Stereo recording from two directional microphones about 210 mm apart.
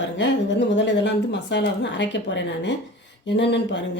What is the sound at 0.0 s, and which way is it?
A woman's voice, 60° left (ahead or behind).